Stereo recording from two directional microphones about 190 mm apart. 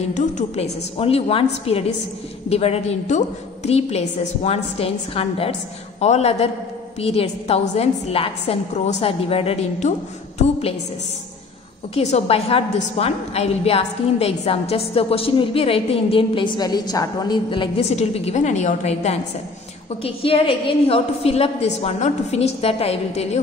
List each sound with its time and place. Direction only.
0.1 s a woman's voice: 40° left (ahead or behind)
11.9 s a woman's voice: 35° left (ahead or behind)